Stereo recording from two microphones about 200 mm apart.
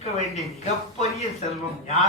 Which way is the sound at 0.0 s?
30° left (ahead or behind).